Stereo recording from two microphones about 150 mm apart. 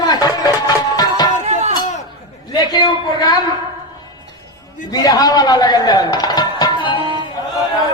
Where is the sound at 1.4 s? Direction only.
50° right (ahead or behind).